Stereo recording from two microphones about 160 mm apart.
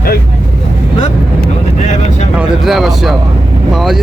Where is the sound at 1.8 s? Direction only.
50° left (ahead or behind).